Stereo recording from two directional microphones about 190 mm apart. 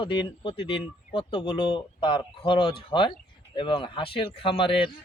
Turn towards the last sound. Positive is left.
turn(degrees=25)  # may be behind; listen again after turning